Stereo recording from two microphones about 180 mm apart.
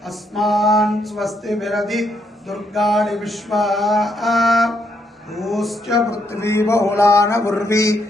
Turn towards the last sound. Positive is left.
turn(degrees=15)  # may be behind; listen again after turning